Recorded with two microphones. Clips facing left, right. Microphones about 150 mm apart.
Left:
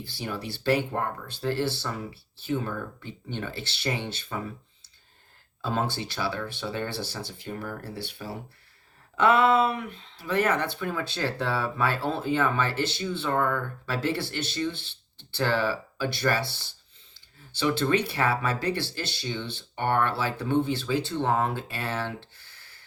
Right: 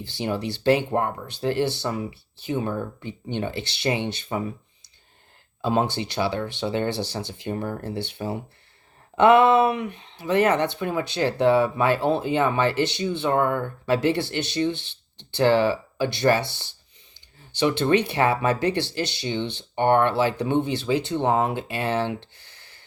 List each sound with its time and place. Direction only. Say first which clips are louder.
0.0 s speech: right 7 dB; 20° right (ahead or behind)
5.6 s speech: right 6 dB; 20° right (ahead or behind)